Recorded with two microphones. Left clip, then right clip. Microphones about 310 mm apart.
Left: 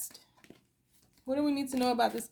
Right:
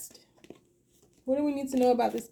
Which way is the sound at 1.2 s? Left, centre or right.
Left.